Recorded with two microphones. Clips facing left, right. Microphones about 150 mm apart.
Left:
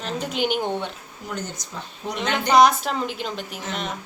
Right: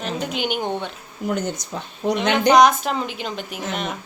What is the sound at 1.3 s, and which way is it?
Speech, 60° right (ahead or behind).